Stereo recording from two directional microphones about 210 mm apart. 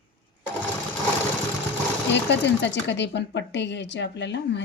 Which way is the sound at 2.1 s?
55° left (ahead or behind).